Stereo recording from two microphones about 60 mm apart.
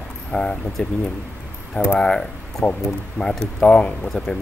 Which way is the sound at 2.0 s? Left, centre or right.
Centre.